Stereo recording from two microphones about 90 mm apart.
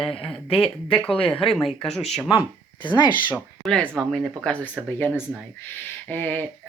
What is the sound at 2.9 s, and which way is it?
Speech, 55° left (ahead or behind).